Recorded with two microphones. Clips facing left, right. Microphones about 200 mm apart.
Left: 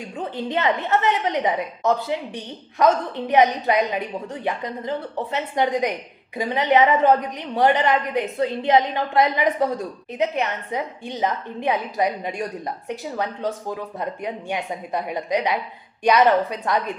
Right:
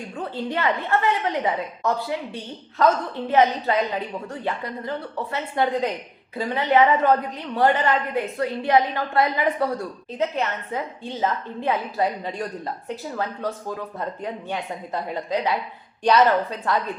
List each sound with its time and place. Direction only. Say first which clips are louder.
0.2 s a woman's voice: left 2 dB; 20° left (ahead or behind)